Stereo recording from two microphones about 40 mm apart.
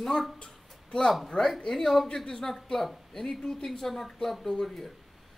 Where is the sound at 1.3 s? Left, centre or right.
Centre.